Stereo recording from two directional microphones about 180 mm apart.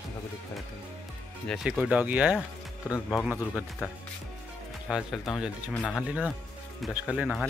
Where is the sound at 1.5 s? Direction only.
5° right (ahead or behind).